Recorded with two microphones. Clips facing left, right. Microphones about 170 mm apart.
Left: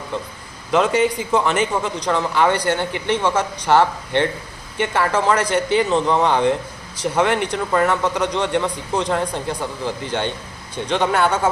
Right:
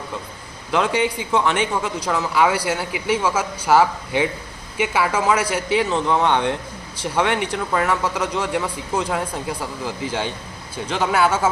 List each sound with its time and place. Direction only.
0.7 s speech: centre (ahead or behind)